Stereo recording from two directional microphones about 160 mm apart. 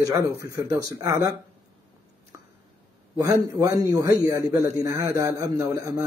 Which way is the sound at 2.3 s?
20° right (ahead or behind).